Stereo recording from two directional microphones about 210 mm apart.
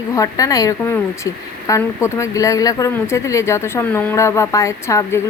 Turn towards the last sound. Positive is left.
turn(degrees=15)  # may be behind; listen again after turning